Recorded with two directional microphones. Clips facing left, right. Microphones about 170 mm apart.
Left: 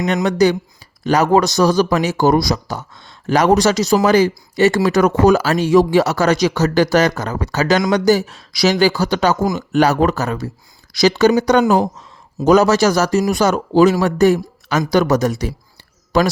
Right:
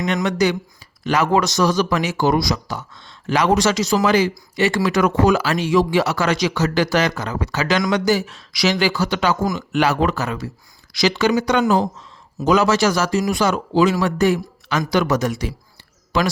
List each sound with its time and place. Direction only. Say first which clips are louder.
0.3 s speech: left 5 dB; 35° left (ahead or behind)